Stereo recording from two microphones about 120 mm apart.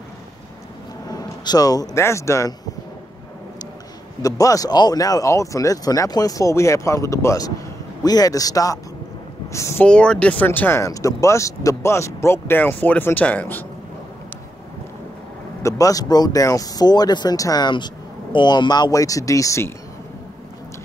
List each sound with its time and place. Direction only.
1.0 s speech: 35° left (ahead or behind)
4.2 s speech: 30° left (ahead or behind)
9.8 s speech: 10° left (ahead or behind)
15.6 s speech: 30° left (ahead or behind)